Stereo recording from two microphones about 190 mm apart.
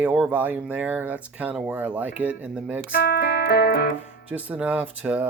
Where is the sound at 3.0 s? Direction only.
60° left (ahead or behind).